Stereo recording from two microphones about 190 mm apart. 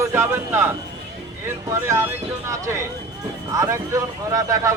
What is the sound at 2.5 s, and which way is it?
Speech, 15° right (ahead or behind).